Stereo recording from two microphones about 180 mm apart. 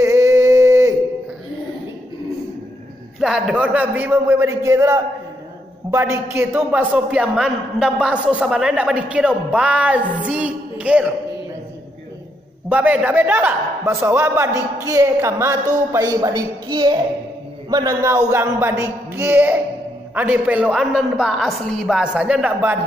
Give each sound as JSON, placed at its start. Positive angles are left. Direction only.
{"t": 0.0, "sound": "a sound", "side_deg": -15}
{"t": 3.2, "sound": "a man's voice", "side_deg": -5}
{"t": 12.6, "sound": "a man's voice", "side_deg": -10}